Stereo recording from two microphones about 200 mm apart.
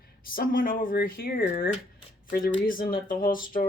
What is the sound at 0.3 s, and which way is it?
Speech, 45° left (ahead or behind).